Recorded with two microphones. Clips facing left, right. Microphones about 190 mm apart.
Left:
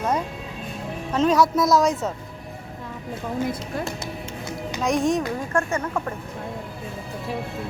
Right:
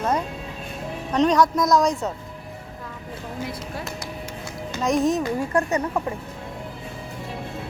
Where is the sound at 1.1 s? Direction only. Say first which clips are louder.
Even; 5° left (ahead or behind).